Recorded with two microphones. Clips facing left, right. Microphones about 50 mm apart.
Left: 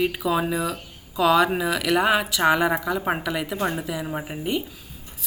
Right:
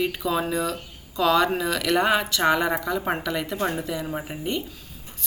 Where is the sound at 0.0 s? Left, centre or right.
Centre.